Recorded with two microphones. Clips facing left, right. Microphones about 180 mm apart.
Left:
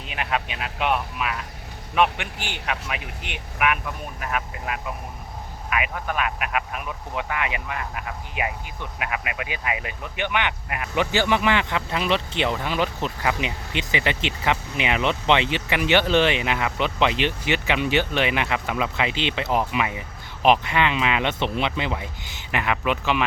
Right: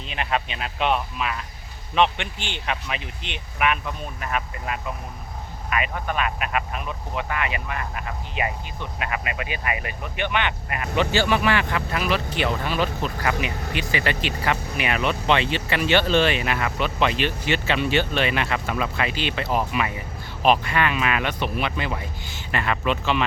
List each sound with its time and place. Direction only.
0.1 s speech: 5° left (ahead or behind)
10.2 s speech: 15° left (ahead or behind)